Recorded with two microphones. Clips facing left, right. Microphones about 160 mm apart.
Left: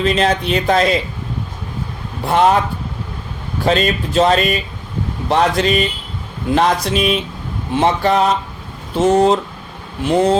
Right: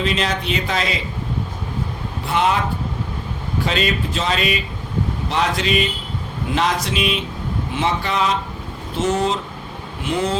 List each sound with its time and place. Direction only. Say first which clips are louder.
0.0 s speech: left 6 dB; 45° left (ahead or behind)
2.2 s speech: left 6 dB; 45° left (ahead or behind)
3.7 s speech: left 7 dB; 45° left (ahead or behind)